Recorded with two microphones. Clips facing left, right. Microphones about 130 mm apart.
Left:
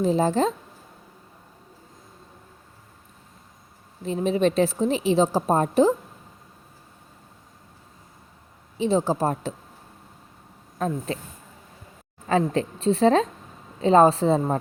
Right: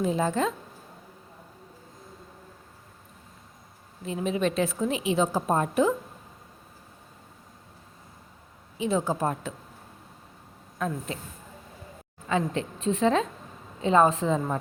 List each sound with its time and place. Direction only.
0.0 s a woman's voice: 30° left (ahead or behind)
4.0 s a woman's voice: 35° left (ahead or behind)
8.8 s a woman's voice: 30° left (ahead or behind)
10.8 s speech: 35° left (ahead or behind)
12.3 s a woman's voice: 35° left (ahead or behind)